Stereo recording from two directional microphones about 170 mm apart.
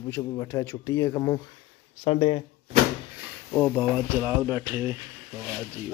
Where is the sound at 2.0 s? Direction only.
35° left (ahead or behind).